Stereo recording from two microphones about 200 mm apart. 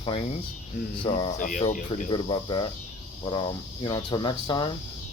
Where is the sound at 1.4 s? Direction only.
40° left (ahead or behind).